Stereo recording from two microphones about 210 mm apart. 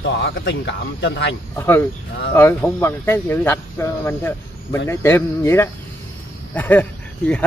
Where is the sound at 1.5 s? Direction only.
10° left (ahead or behind).